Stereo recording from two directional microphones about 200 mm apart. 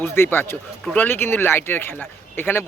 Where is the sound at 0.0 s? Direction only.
10° left (ahead or behind).